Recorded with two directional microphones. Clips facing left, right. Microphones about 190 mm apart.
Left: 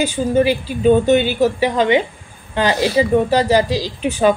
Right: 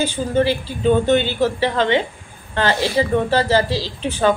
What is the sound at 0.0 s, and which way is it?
A woman's voice, 15° left (ahead or behind).